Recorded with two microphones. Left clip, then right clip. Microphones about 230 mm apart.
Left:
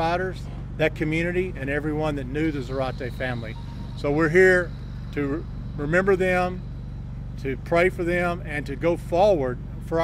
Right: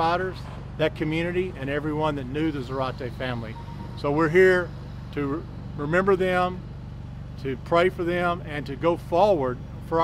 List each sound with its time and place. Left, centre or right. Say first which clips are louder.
0.0 s speech: right 1 dB; right